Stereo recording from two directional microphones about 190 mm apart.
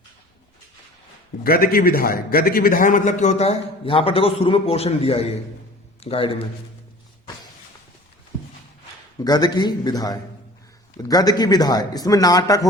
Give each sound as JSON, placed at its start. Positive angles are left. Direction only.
{"t": 1.5, "sound": "a man's voice", "side_deg": 50}
{"t": 9.2, "sound": "a man's voice", "side_deg": 20}